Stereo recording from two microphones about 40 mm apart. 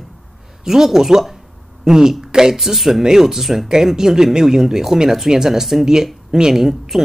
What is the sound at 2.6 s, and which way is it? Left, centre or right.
Speech, centre.